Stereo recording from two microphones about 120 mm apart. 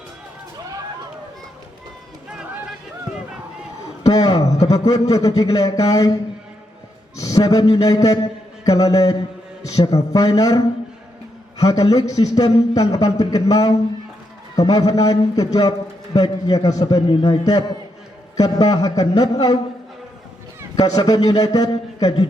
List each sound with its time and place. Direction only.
4.1 s a sound: 30° left (ahead or behind)
4.6 s a man's voice: 30° left (ahead or behind)
7.2 s a man's voice: 30° left (ahead or behind)
17.2 s a man's voice: 50° left (ahead or behind)
18.3 s a man's voice: 35° left (ahead or behind)
20.7 s a man's voice: 30° left (ahead or behind)